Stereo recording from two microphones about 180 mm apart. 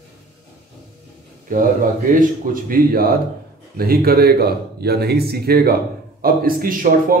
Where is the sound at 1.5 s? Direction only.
50° right (ahead or behind).